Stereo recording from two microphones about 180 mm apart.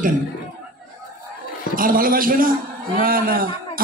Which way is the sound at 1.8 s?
50° right (ahead or behind).